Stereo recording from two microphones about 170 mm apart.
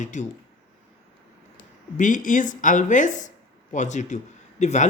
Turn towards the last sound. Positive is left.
turn(degrees=45)  # may be behind; listen again after turning